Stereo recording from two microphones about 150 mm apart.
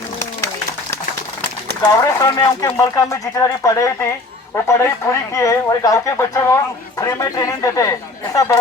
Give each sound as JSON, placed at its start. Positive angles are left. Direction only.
{"t": 1.8, "sound": "speech", "side_deg": 25}